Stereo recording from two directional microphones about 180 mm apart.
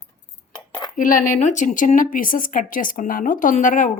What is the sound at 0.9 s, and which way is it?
Speech, 50° left (ahead or behind).